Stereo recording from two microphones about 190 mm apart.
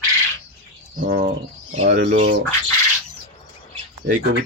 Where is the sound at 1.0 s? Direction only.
55° right (ahead or behind).